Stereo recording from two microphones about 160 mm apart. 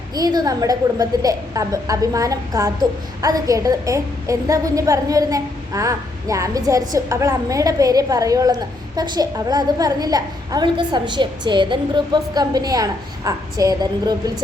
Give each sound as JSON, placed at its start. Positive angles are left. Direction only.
{"t": 0.1, "sound": "a woman's voice", "side_deg": -25}